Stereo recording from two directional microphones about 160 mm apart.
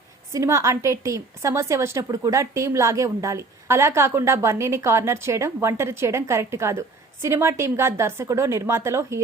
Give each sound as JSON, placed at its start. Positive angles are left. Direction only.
{"t": 0.3, "sound": "a woman's voice", "side_deg": -20}